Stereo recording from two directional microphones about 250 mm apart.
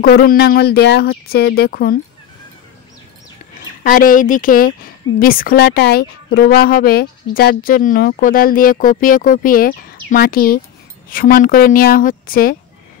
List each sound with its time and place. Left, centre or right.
0.0 s speech: left
3.8 s speech: left